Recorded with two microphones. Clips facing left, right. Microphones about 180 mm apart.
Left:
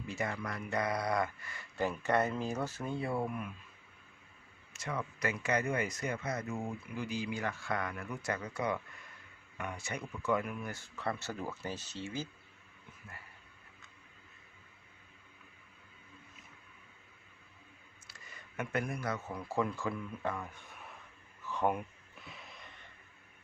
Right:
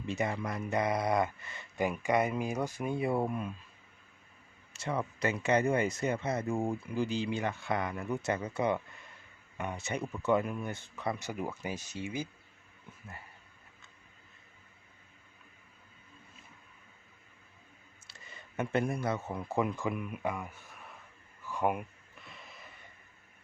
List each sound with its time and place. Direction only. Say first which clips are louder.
0.0 s speech: right 4 dB; 20° right (ahead or behind)
4.7 s speech: right 4 dB; 30° right (ahead or behind); by 12.3 s 15° right (ahead or behind)
18.1 s speech: right 4 dB; 25° right (ahead or behind); by 20.9 s 5° right (ahead or behind)
21.4 s gasp: right 1 dB; 10° right (ahead or behind)